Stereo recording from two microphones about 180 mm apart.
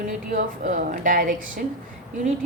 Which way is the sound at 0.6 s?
50° right (ahead or behind).